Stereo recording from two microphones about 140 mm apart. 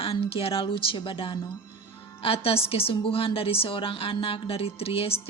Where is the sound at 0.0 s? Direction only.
40° left (ahead or behind).